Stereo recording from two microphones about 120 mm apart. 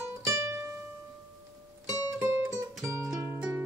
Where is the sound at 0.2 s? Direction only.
25° right (ahead or behind).